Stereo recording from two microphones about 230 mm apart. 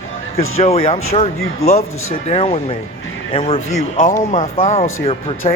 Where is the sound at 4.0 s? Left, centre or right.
Left.